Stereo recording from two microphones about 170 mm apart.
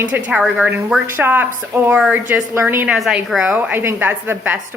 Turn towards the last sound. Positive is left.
turn(degrees=-10)  # may be behind; listen again after turning